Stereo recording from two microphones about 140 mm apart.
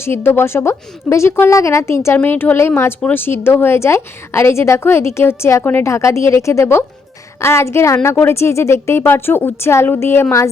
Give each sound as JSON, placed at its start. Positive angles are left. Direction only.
{"t": 0.0, "sound": "a woman's voice", "side_deg": 15}